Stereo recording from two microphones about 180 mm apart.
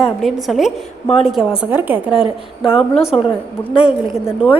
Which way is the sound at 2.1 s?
30° left (ahead or behind).